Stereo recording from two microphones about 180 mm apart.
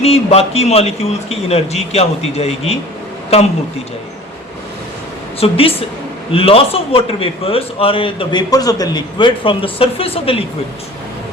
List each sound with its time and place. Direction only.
0.0 s a man's voice: 35° left (ahead or behind)
5.4 s a man's voice: 30° left (ahead or behind)